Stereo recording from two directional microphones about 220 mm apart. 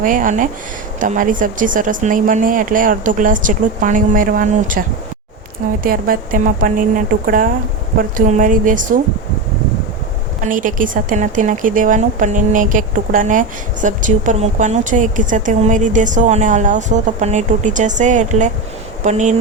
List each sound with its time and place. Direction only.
0.0 s a woman's voice: 35° right (ahead or behind)
5.8 s a woman's voice: 40° right (ahead or behind)
10.5 s a woman's voice: 35° right (ahead or behind)